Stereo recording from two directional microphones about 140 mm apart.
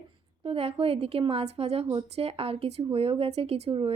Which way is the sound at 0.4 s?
45° right (ahead or behind).